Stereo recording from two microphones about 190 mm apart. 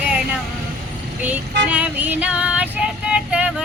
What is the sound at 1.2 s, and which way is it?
Child singing, 10° right (ahead or behind).